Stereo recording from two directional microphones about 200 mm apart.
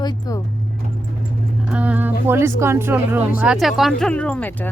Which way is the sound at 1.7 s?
5° right (ahead or behind).